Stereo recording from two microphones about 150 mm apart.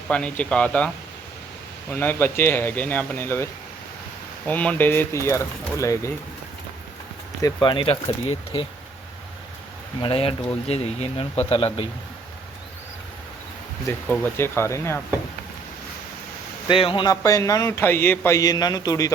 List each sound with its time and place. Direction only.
0.1 s speech: 5° left (ahead or behind)
1.9 s speech: 15° left (ahead or behind)
7.4 s speech: 30° left (ahead or behind)
10.0 s speech: 40° left (ahead or behind)
13.8 s speech: 15° left (ahead or behind)
16.6 s speech: 35° left (ahead or behind)